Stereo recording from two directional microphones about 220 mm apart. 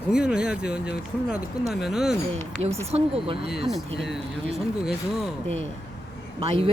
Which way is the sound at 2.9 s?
30° right (ahead or behind).